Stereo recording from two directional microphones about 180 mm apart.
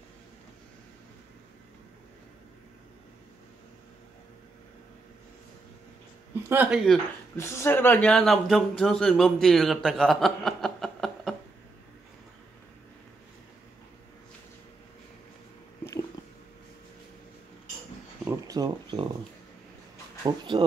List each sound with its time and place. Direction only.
6.5 s speech: 10° right (ahead or behind)
7.3 s a man's voice: 15° left (ahead or behind)
15.8 s squish: 20° left (ahead or behind)
18.2 s a sound: 15° right (ahead or behind)
20.2 s speech: 25° right (ahead or behind)